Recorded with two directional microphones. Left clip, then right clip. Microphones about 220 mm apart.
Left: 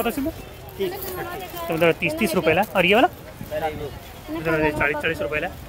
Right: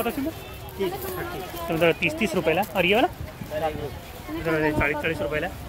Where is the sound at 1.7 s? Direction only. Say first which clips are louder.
Left 2 dB; 15° left (ahead or behind).